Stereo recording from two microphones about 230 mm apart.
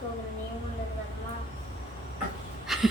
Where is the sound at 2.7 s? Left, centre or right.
Centre.